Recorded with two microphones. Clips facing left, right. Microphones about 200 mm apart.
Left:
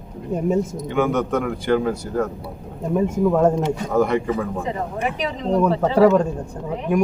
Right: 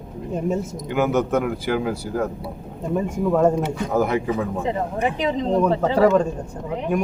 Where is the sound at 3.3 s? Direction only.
5° left (ahead or behind).